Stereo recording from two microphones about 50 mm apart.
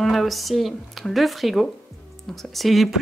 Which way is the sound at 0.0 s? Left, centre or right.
Centre.